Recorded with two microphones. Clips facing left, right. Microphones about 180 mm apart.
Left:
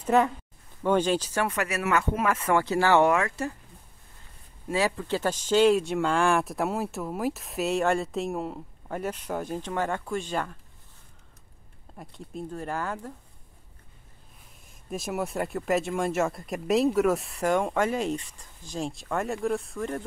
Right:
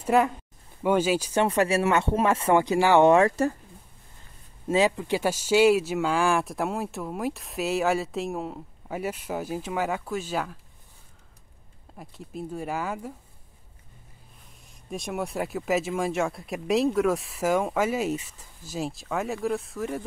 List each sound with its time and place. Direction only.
0.0 s speech: 10° right (ahead or behind)
1.3 s speech: 25° right (ahead or behind)
2.6 s speech: 15° right (ahead or behind)
3.1 s speech: 35° right (ahead or behind)
4.6 s speech: 20° right (ahead or behind)
12.0 s speech: centre (ahead or behind)
14.9 s speech: centre (ahead or behind)